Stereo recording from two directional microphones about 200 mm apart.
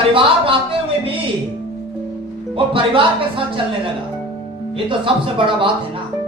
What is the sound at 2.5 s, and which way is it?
Speech, 25° right (ahead or behind).